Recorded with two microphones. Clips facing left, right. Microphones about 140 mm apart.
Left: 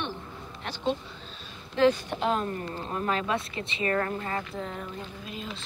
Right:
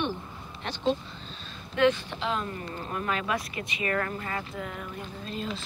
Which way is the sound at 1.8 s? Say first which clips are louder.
Left 1 dB; 40° left (ahead or behind).